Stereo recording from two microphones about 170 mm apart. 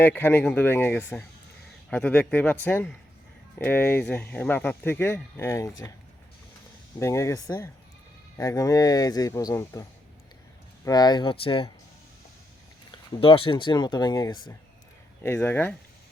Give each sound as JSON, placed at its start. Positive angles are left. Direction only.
{"t": 0.0, "sound": "speech", "side_deg": 10}
{"t": 7.0, "sound": "speech", "side_deg": 15}
{"t": 10.8, "sound": "speech", "side_deg": 25}
{"t": 12.9, "sound": "speech", "side_deg": 30}
{"t": 15.2, "sound": "speech", "side_deg": 10}